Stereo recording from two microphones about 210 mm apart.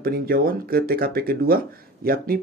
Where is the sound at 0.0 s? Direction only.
45° right (ahead or behind).